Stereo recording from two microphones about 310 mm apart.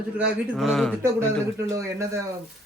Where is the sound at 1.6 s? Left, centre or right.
Centre.